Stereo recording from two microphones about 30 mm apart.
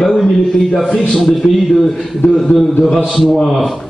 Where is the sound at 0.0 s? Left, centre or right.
Centre.